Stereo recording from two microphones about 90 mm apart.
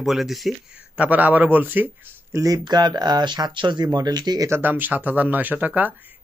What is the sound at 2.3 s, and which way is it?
Speech, 35° right (ahead or behind).